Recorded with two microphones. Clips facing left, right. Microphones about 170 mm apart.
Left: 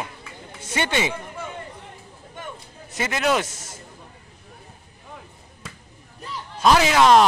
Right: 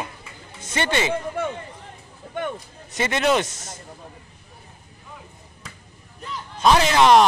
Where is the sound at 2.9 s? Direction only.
5° left (ahead or behind).